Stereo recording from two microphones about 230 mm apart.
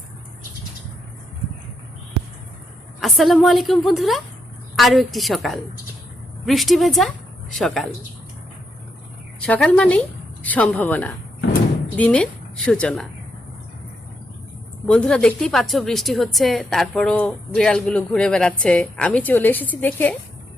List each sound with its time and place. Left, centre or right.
3.0 s a woman's voice: centre
9.4 s a woman's voice: centre
14.8 s a woman's voice: centre